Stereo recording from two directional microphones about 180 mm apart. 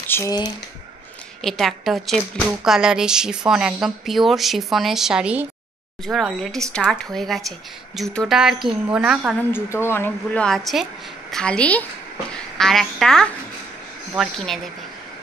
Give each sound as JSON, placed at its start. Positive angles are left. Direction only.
{"t": 0.1, "sound": "speech", "side_deg": 20}
{"t": 1.4, "sound": "a woman's voice", "side_deg": 0}
{"t": 9.5, "sound": "a woman's voice", "side_deg": 15}